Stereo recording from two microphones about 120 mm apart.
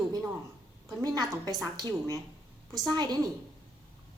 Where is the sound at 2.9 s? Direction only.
35° right (ahead or behind).